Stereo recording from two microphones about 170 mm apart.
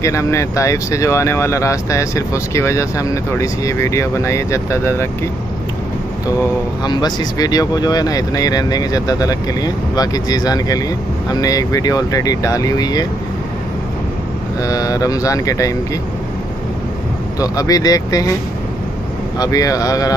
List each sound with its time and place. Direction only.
0.0 s speech: 15° left (ahead or behind)
6.8 s speech: 25° left (ahead or behind)
14.6 s speech: 20° left (ahead or behind)
17.4 s speech: 20° left (ahead or behind)
19.3 s speech: 20° left (ahead or behind)